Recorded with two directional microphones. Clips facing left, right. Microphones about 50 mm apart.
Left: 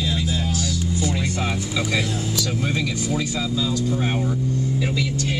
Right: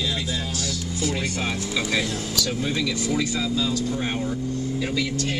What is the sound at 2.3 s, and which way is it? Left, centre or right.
Speech, left.